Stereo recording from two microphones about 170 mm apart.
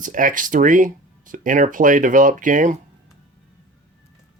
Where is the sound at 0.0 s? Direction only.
50° right (ahead or behind).